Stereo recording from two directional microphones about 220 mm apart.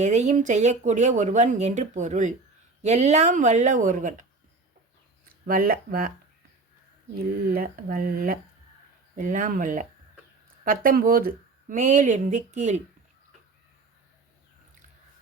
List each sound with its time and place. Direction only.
0.0 s speech: 30° right (ahead or behind)
5.5 s speech: 40° right (ahead or behind)
7.4 s speech: 40° right (ahead or behind)